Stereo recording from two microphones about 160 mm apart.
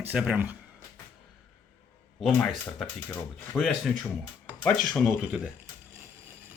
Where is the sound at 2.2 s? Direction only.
Centre (ahead or behind).